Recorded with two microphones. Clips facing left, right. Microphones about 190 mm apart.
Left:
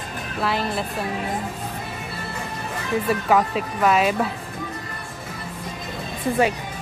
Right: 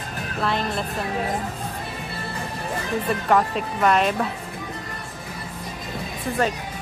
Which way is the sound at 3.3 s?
5° left (ahead or behind).